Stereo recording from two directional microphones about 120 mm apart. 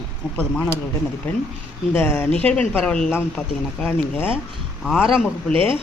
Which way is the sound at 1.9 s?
20° left (ahead or behind).